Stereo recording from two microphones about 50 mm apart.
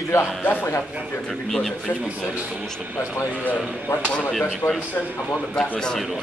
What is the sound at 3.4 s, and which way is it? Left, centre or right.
Speech, left.